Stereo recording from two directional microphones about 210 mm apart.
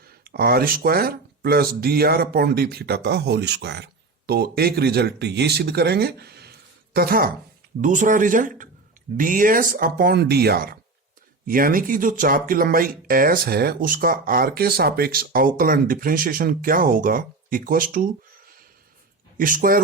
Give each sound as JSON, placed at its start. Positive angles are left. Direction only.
{"t": 0.3, "sound": "speech", "side_deg": -45}
{"t": 19.4, "sound": "speech", "side_deg": -40}